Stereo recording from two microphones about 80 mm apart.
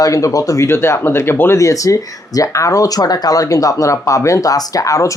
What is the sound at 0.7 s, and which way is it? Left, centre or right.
Speech, left.